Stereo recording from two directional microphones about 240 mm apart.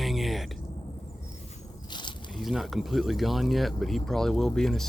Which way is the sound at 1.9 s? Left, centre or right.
Centre.